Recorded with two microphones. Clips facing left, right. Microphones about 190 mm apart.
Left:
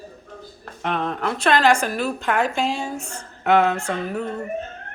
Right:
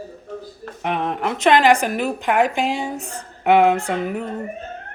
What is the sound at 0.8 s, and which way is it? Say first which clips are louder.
A woman's voice: right 2 dB; 15° right (ahead or behind).